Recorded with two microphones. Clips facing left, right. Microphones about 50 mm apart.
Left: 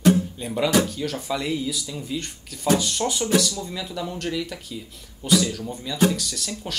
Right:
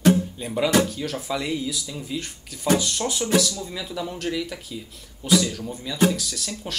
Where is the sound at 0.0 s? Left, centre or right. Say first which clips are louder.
Even; centre.